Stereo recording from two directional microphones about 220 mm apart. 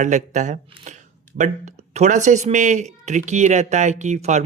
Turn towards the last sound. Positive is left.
turn(degrees=-30)  # may be behind; listen again after turning